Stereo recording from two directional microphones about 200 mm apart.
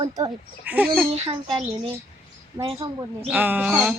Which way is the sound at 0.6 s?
5° right (ahead or behind).